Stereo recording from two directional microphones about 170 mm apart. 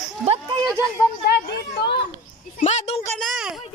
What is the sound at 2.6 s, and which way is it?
Speech, 40° left (ahead or behind).